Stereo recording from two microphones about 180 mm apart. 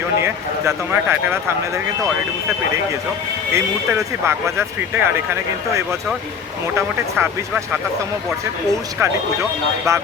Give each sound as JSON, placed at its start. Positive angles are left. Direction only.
{"t": 0.2, "sound": "speech", "side_deg": -15}
{"t": 3.5, "sound": "speech", "side_deg": -15}
{"t": 9.0, "sound": "speech", "side_deg": -15}